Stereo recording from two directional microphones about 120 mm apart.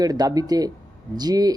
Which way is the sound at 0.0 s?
30° right (ahead or behind).